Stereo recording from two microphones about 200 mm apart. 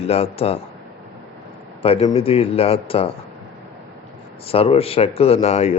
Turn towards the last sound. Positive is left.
turn(degrees=35)  # may be behind; listen again after turning